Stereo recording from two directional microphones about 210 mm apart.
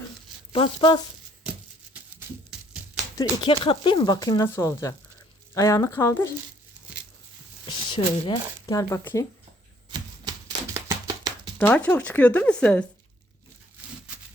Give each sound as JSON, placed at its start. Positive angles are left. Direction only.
{"t": 0.5, "sound": "speech", "side_deg": 25}
{"t": 3.2, "sound": "speech", "side_deg": 25}
{"t": 7.9, "sound": "speech", "side_deg": 20}
{"t": 10.8, "sound": "music", "side_deg": -15}
{"t": 11.5, "sound": "speech", "side_deg": 5}